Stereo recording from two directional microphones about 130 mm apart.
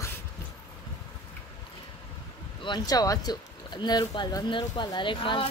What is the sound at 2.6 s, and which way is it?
Speech, 30° left (ahead or behind).